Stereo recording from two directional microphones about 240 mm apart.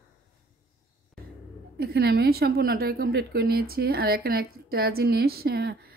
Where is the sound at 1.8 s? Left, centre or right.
Right.